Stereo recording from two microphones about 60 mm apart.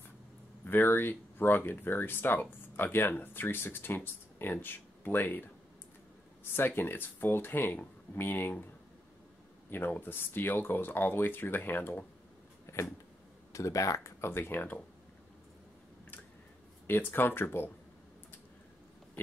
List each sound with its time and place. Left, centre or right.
0.7 s speech: left
6.5 s speech: left
9.7 s speech: left
12.7 s a sound: left
13.5 s speech: left
14.3 s speech: left
16.8 s speech: left